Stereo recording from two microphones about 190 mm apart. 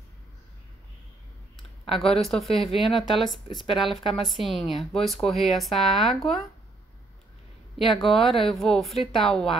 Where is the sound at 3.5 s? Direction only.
30° left (ahead or behind).